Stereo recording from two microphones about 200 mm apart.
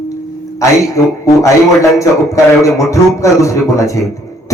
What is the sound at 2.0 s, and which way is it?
Speech, 15° left (ahead or behind).